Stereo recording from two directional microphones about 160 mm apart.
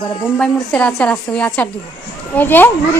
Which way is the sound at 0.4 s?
5° left (ahead or behind).